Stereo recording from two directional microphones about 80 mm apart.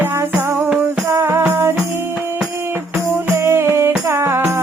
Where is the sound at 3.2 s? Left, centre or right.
Right.